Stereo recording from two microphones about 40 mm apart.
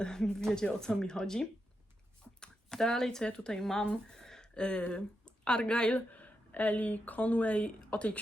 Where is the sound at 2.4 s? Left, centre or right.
Centre.